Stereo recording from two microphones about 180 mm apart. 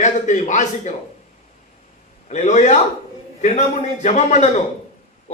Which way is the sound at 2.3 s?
40° left (ahead or behind).